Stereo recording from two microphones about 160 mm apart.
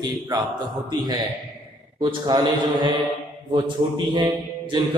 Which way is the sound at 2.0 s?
25° right (ahead or behind).